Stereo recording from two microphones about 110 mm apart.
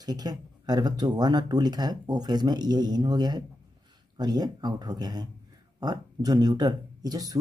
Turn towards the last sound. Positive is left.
turn(degrees=-35)  # may be behind; listen again after turning